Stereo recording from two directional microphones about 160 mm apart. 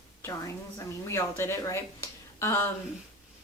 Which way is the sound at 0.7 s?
15° left (ahead or behind).